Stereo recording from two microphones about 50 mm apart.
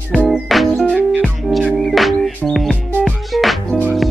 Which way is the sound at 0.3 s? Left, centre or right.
Centre.